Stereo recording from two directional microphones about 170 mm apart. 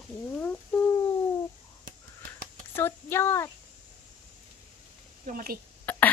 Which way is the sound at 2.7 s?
15° left (ahead or behind).